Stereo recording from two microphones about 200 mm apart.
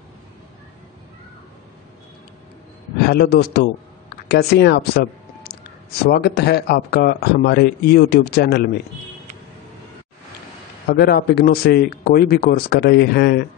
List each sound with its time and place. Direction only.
3.1 s speech: 50° left (ahead or behind)
10.9 s speech: 50° left (ahead or behind)